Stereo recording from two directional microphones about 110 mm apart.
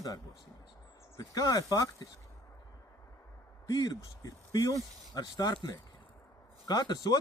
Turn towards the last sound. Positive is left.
turn(degrees=40)  # may be behind; listen again after turning